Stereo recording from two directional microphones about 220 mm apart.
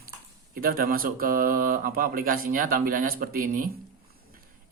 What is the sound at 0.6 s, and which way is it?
Speech, 40° right (ahead or behind).